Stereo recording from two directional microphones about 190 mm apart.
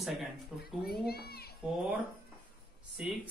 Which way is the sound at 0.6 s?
55° left (ahead or behind).